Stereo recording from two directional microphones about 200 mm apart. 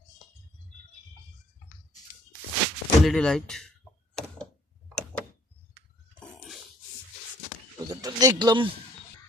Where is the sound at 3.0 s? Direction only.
Centre (ahead or behind).